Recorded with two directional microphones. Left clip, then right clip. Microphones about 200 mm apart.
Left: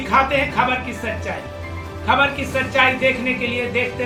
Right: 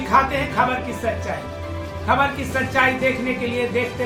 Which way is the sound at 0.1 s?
Centre (ahead or behind).